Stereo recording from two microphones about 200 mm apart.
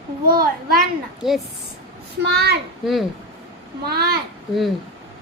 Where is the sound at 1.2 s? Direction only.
Centre (ahead or behind).